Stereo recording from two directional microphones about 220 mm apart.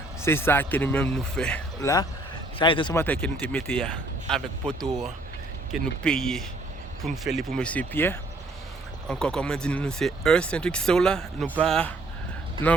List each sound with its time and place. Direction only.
0.2 s speech: 10° left (ahead or behind)
1.8 s speech: 15° left (ahead or behind)
3.0 s speech: 5° left (ahead or behind)